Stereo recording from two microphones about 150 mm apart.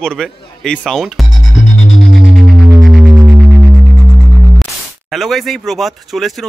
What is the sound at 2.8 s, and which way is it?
Music, centre (ahead or behind).